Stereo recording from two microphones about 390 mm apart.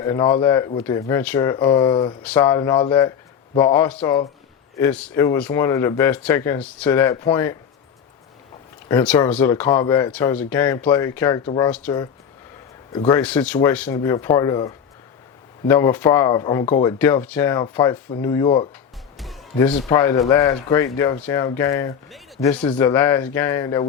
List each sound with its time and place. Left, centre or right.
0.0 s speech: centre
8.9 s speech: centre
19.1 s speech: centre